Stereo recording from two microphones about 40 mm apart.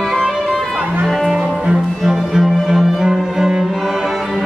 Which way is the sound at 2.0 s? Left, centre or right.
Centre.